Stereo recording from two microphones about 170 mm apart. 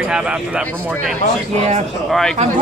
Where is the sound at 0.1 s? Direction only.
5° right (ahead or behind).